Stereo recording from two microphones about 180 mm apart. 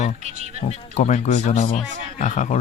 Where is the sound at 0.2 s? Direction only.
40° right (ahead or behind).